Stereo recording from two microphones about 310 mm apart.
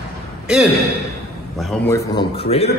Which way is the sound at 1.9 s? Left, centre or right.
Centre.